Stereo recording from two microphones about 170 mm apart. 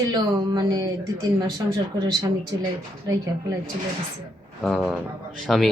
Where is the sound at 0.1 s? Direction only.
25° right (ahead or behind).